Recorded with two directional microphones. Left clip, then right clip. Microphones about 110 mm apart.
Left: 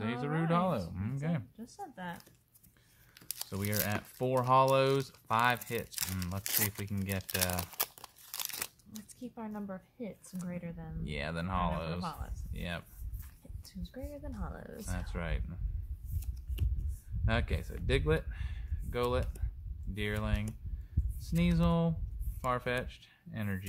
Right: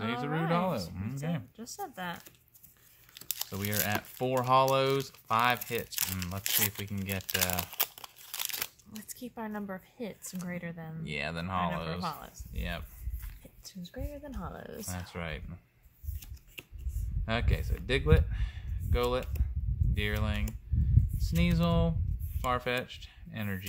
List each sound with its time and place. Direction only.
0.0 s a sound: 30° left (ahead or behind)
1.6 s speech: 65° right (ahead or behind)
3.2 s crumpling: 20° left (ahead or behind)
3.5 s speech: 15° left (ahead or behind)
7.5 s crumpling: 10° left (ahead or behind)
9.1 s speech: 55° right (ahead or behind)
11.1 s speech: 20° left (ahead or behind)
12.0 s speech: 70° right (ahead or behind)
12.5 s speech: 30° left (ahead or behind)
13.4 s speech: 30° right (ahead or behind)
14.9 s speech: 25° left (ahead or behind)
17.2 s speech: 20° left (ahead or behind)